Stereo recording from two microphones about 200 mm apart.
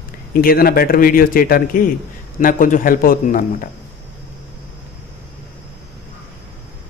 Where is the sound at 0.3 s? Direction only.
45° left (ahead or behind).